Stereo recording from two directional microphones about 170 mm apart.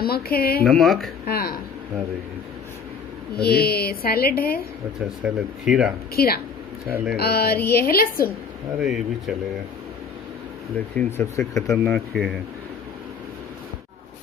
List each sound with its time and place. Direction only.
0.0 s a woman's voice: 65° left (ahead or behind)
0.7 s speech: centre (ahead or behind)
1.2 s speech: 65° left (ahead or behind)
3.3 s a woman's voice: 65° left (ahead or behind)
5.0 s speech: 5° right (ahead or behind)
6.1 s a woman's voice: 65° left (ahead or behind)
8.7 s speech: centre (ahead or behind)
11.0 s speech: 15° left (ahead or behind)
11.6 s speech: centre (ahead or behind)